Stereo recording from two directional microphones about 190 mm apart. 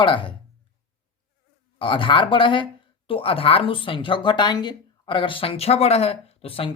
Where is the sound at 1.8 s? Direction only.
25° left (ahead or behind).